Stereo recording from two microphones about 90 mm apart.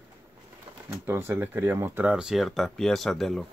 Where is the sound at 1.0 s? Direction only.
25° right (ahead or behind).